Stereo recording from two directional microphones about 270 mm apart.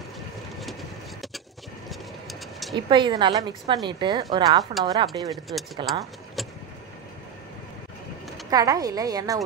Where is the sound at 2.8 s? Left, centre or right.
Centre.